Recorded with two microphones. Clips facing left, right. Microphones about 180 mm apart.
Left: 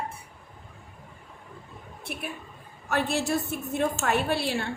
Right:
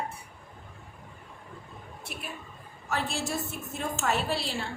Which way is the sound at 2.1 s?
55° left (ahead or behind).